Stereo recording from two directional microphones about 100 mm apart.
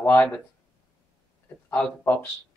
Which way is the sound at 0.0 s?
20° left (ahead or behind).